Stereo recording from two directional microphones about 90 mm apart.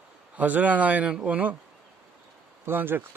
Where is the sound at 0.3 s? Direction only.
15° right (ahead or behind).